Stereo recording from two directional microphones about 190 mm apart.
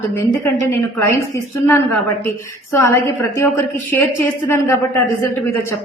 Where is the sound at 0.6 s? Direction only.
15° left (ahead or behind).